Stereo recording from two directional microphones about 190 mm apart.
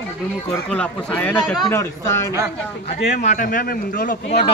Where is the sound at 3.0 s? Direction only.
40° left (ahead or behind).